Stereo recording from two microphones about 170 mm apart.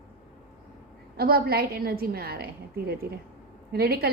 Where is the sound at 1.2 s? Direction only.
65° right (ahead or behind).